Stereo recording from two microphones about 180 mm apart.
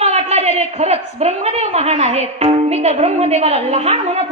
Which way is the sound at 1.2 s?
35° right (ahead or behind).